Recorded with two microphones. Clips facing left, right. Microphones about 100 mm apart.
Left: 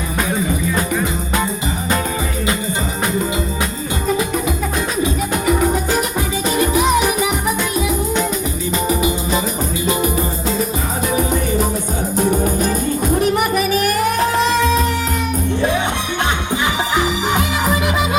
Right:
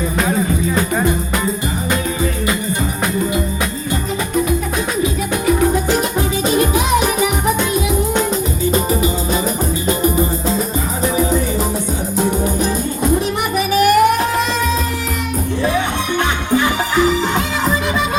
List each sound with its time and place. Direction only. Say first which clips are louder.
13.6 s music: right 4 dB; 35° left (ahead or behind)
16.9 s music: right 4 dB; 15° left (ahead or behind)